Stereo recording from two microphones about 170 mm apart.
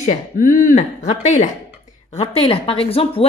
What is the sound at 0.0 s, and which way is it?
Speech, 45° left (ahead or behind).